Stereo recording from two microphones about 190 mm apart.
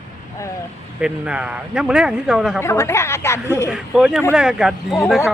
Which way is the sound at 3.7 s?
5° right (ahead or behind).